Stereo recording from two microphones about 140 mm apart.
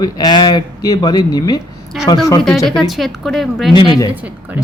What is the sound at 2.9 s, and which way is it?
Speech, centre (ahead or behind).